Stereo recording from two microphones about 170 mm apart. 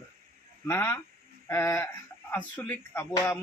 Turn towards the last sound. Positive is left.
turn(degrees=15)  # may be behind; listen again after turning